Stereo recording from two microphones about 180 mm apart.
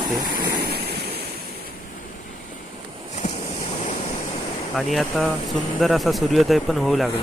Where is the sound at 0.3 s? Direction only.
60° right (ahead or behind).